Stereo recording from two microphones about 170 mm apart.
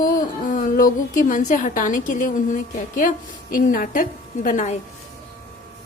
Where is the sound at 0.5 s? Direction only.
55° left (ahead or behind).